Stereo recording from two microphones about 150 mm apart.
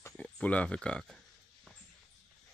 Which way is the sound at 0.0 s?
10° left (ahead or behind).